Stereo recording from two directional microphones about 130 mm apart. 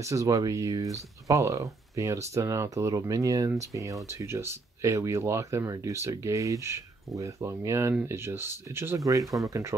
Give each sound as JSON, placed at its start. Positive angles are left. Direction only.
{"t": 0.0, "sound": "speech", "side_deg": -25}